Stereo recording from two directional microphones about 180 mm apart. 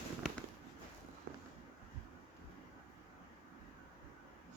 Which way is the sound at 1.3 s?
55° right (ahead or behind).